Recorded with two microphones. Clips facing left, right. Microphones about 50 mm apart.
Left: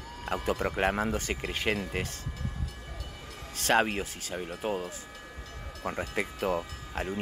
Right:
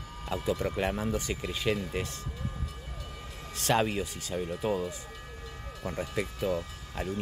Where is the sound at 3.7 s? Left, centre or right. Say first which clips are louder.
Left 1 dB; left.